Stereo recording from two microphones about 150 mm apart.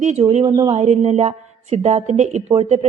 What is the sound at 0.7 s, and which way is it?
A woman's voice, 45° right (ahead or behind).